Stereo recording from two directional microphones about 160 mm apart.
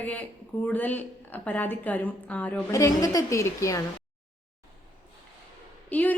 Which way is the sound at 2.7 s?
20° left (ahead or behind).